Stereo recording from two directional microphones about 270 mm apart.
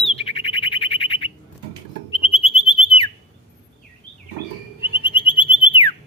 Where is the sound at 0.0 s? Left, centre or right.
Left.